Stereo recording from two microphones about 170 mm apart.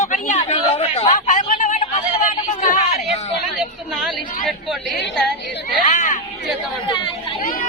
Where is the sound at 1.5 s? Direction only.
45° left (ahead or behind).